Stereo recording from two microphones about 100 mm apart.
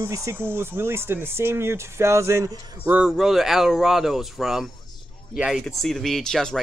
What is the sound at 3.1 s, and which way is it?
Speech, centre (ahead or behind).